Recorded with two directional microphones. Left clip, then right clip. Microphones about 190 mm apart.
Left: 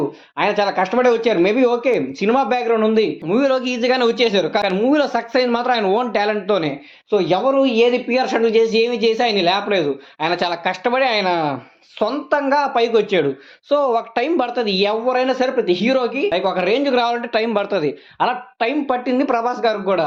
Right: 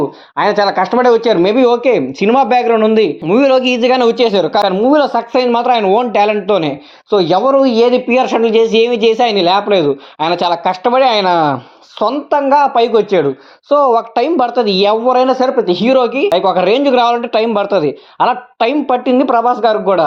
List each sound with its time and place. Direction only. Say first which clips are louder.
0.3 s speech: right 6 dB; 35° right (ahead or behind)